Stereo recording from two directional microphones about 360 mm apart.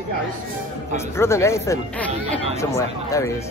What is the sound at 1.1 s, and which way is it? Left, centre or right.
Speech, centre.